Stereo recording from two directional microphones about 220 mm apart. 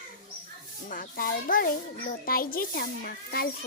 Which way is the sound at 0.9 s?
40° left (ahead or behind).